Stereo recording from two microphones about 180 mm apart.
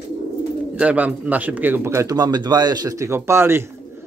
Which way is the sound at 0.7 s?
10° right (ahead or behind).